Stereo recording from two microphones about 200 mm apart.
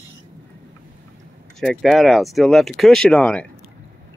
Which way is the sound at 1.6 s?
Centre (ahead or behind).